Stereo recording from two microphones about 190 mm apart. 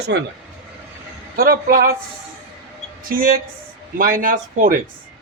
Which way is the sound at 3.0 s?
45° right (ahead or behind).